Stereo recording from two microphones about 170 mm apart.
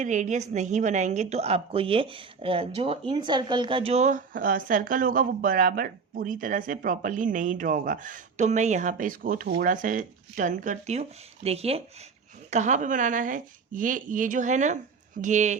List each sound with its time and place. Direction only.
0.0 s a woman's voice: 45° right (ahead or behind)